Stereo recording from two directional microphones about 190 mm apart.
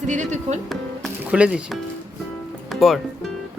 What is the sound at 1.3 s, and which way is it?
Speech, 5° right (ahead or behind).